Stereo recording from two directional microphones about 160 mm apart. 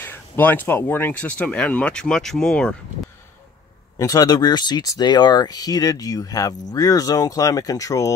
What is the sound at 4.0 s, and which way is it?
Speech, 20° left (ahead or behind).